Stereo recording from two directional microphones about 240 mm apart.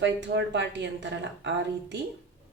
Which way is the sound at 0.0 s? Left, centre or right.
Right.